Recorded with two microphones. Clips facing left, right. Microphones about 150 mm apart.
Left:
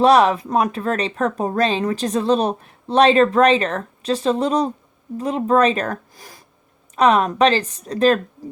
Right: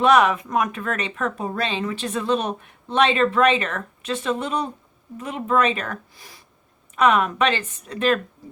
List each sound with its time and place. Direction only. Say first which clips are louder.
0.0 s speech: left 3 dB; 35° left (ahead or behind)